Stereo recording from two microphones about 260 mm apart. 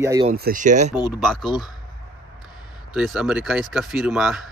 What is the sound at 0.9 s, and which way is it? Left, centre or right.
Speech, centre.